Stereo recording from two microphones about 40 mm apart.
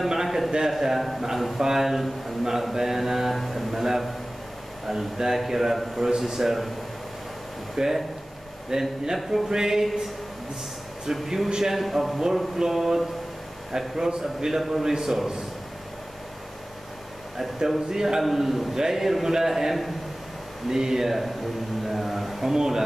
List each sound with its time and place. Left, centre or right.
0.1 s a sound: centre
0.7 s a man's voice: centre
3.3 s a sound: centre
4.8 s a man's voice: centre
7.7 s a man's voice: centre
11.1 s a man's voice: centre
11.8 s a man's voice: centre
17.6 s a man's voice: centre
21.8 s a sound: centre
22.5 s a man's voice: centre